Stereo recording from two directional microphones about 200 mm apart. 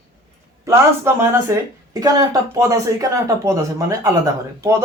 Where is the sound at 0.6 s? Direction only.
15° right (ahead or behind).